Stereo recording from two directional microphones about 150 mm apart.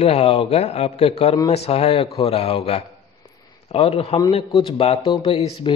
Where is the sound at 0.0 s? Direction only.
45° left (ahead or behind).